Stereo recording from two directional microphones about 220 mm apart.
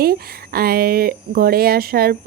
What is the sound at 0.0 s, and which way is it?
Speech, 45° right (ahead or behind).